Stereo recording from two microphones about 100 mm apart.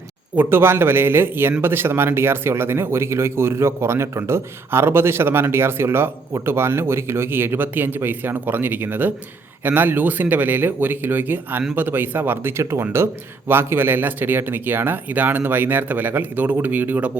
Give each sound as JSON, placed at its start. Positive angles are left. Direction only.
{"t": 0.3, "sound": "speech", "side_deg": -25}